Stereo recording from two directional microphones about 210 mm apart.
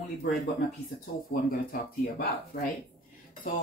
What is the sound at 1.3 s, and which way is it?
Speech, 40° left (ahead or behind).